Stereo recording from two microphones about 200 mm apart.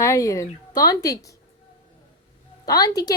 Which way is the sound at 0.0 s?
15° left (ahead or behind).